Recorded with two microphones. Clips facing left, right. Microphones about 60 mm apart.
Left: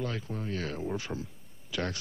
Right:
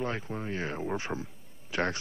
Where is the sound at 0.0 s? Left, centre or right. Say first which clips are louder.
Right 2 dB; right.